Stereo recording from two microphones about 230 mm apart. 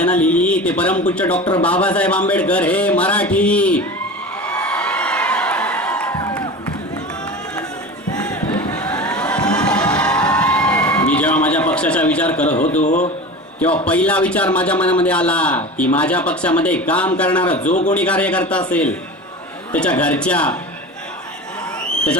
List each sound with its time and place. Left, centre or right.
0.0 s speech: centre
4.4 s a sound: centre
6.1 s music: centre
8.1 s a sound: centre
12.5 s a man's voice: left
13.8 s speech: centre
17.6 s a man's voice: left
17.9 s speech: centre